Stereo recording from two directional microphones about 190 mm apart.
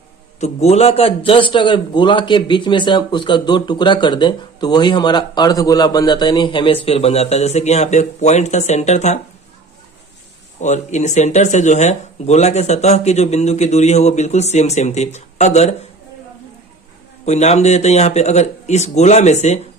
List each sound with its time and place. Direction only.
0.3 s a man's voice: 35° left (ahead or behind)
10.6 s speech: 40° left (ahead or behind)
17.2 s speech: 35° left (ahead or behind)